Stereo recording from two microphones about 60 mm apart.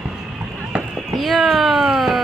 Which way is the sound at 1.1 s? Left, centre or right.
Centre.